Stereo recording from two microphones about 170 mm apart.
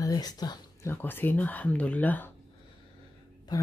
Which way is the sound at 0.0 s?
20° left (ahead or behind).